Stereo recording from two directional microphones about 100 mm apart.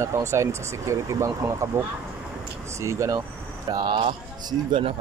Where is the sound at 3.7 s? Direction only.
45° right (ahead or behind).